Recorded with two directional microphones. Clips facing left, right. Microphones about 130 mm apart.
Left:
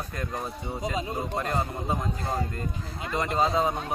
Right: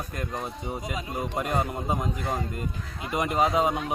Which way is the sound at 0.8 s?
25° left (ahead or behind).